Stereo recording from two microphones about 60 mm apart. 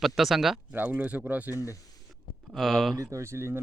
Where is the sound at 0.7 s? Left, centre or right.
Right.